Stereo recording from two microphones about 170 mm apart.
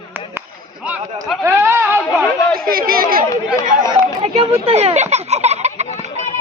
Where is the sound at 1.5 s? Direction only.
15° right (ahead or behind).